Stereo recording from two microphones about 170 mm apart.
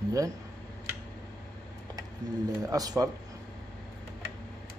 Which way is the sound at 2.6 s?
20° right (ahead or behind).